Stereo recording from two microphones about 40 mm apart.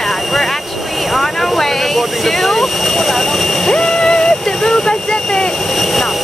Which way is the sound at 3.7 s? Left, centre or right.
Centre.